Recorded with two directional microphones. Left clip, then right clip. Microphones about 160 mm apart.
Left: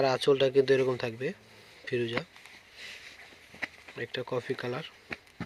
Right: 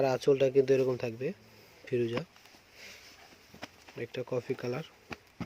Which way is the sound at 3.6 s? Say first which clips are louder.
Left 5 dB; 20° right (ahead or behind).